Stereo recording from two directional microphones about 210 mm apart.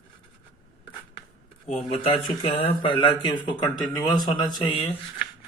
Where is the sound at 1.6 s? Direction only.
30° left (ahead or behind).